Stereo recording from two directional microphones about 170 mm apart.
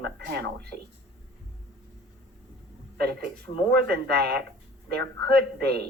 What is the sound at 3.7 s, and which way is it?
A woman's voice, 70° right (ahead or behind).